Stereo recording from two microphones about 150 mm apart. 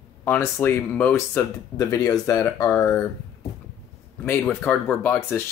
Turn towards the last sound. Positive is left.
turn(degrees=15)  # may be behind; listen again after turning